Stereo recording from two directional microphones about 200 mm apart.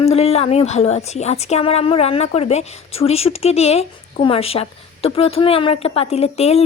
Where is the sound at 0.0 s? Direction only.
30° left (ahead or behind).